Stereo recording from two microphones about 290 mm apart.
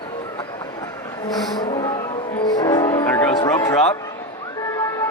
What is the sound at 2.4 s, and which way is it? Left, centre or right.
Music, centre.